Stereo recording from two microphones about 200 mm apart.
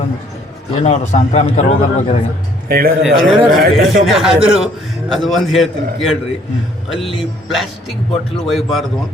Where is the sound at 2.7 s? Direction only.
50° right (ahead or behind).